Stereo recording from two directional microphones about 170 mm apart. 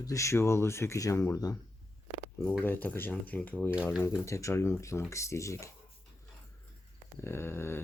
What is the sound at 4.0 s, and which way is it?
Speech, 15° left (ahead or behind).